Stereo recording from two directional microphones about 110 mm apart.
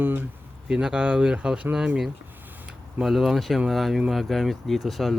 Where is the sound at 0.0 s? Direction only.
20° right (ahead or behind).